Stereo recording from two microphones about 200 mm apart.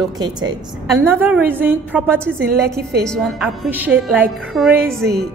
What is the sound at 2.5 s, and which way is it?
Speech, 50° right (ahead or behind).